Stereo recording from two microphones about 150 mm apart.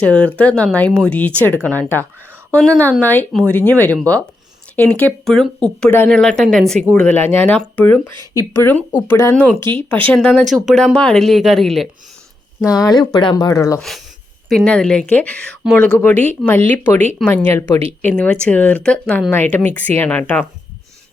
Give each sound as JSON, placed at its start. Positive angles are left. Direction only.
{"t": 0.0, "sound": "speech", "side_deg": 10}
{"t": 8.3, "sound": "speech", "side_deg": 20}
{"t": 9.3, "sound": "speech", "side_deg": 10}
{"t": 9.6, "sound": "speech", "side_deg": -30}
{"t": 10.1, "sound": "speech", "side_deg": 5}
{"t": 12.6, "sound": "speech", "side_deg": 25}
{"t": 13.7, "sound": "speech", "side_deg": 0}
{"t": 18.1, "sound": "speech", "side_deg": 5}